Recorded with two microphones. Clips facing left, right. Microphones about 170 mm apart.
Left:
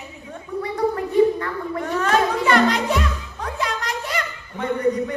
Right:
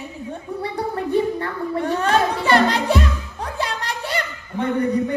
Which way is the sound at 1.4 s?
30° right (ahead or behind).